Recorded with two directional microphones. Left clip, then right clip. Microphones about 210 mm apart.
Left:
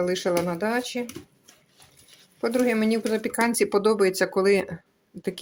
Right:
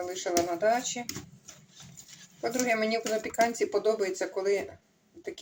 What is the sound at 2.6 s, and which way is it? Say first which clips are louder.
Speech: left 2 dB; 55° left (ahead or behind).